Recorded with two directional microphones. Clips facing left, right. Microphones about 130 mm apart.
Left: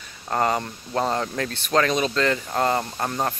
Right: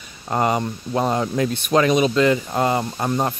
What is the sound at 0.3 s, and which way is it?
Speech, 15° right (ahead or behind).